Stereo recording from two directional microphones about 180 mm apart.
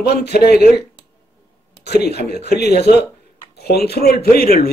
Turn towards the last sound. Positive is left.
turn(degrees=55)  # may be behind; listen again after turning